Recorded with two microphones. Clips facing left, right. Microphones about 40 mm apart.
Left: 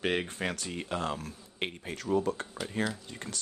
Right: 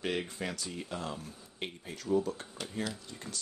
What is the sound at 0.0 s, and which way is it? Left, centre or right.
Speech, left.